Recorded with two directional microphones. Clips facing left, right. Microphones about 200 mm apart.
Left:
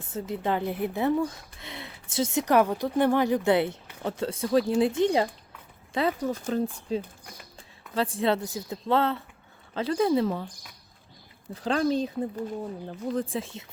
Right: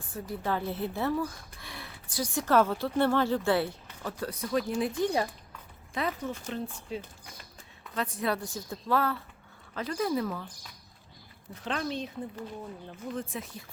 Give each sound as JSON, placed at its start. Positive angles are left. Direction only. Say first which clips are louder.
{"t": 0.1, "sound": "speech", "louder": "left 4 dB", "side_deg": 20}
{"t": 7.9, "sound": "speech", "louder": "left 6 dB", "side_deg": 30}
{"t": 11.5, "sound": "speech", "louder": "left 8 dB", "side_deg": 35}